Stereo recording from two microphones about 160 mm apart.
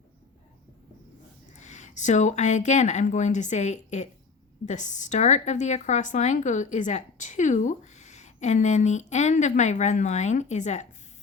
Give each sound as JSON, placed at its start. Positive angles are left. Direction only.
{"t": 1.5, "sound": "speech", "side_deg": 45}